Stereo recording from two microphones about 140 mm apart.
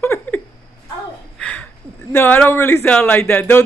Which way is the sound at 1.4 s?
10° left (ahead or behind).